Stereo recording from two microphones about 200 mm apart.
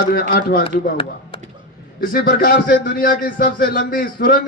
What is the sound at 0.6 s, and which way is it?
Speech, 25° left (ahead or behind).